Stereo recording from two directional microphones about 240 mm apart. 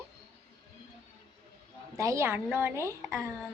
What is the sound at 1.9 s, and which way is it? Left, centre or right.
A woman's voice, centre.